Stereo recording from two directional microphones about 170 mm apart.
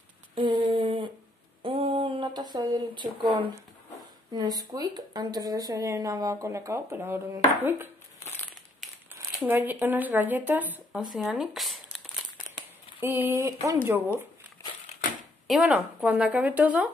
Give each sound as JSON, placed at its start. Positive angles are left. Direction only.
{"t": 0.3, "sound": "a sound", "side_deg": -25}
{"t": 4.3, "sound": "speech", "side_deg": -25}
{"t": 9.1, "sound": "speech", "side_deg": -10}
{"t": 11.1, "sound": "crumpling", "side_deg": 0}
{"t": 13.0, "sound": "a woman's voice", "side_deg": -10}
{"t": 15.4, "sound": "a woman's voice", "side_deg": 0}